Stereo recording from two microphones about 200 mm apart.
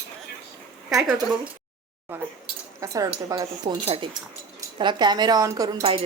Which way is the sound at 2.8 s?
15° right (ahead or behind).